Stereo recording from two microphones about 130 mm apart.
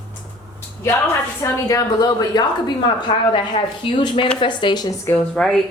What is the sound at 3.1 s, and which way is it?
Speech, 40° left (ahead or behind).